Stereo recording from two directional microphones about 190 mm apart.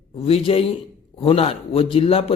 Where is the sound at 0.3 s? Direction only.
30° left (ahead or behind).